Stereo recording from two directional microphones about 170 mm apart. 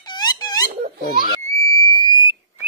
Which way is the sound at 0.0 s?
25° left (ahead or behind).